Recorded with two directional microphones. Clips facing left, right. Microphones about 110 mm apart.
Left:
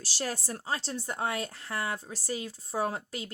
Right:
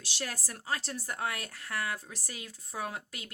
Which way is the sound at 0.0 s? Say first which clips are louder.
Left 5 dB; 35° left (ahead or behind).